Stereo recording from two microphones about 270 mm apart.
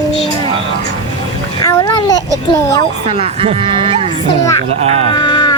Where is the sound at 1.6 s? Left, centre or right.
Centre.